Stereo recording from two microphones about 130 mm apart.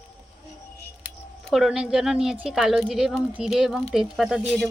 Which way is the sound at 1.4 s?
Centre (ahead or behind).